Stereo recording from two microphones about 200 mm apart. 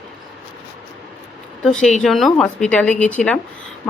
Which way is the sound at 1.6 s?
5° left (ahead or behind).